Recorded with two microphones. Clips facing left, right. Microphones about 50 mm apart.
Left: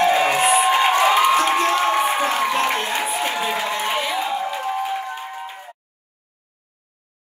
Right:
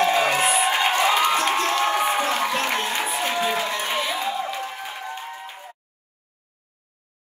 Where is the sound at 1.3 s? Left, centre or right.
Left.